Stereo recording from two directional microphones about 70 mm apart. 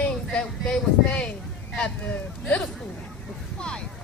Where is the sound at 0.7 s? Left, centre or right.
Centre.